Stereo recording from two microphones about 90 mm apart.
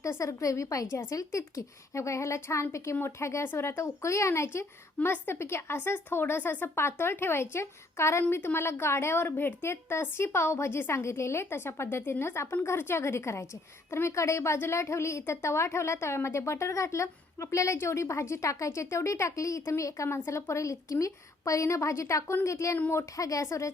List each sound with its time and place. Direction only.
0.0 s a woman's voice: 35° left (ahead or behind)